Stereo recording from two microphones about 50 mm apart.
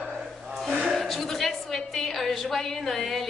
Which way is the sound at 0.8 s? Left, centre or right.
Centre.